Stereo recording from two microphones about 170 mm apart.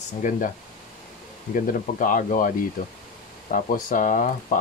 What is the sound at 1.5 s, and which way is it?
Speech, 50° left (ahead or behind).